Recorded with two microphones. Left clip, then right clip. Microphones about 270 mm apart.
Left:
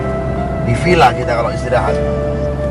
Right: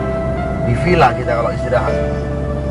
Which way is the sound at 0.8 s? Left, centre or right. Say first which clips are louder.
Left 2 dB; centre.